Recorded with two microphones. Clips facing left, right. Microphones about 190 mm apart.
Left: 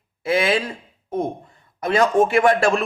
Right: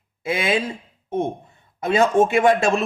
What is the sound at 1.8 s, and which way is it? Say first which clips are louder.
Speech: even; 25° right (ahead or behind).